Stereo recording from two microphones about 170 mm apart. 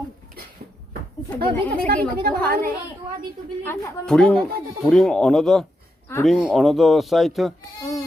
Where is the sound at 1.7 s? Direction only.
55° right (ahead or behind).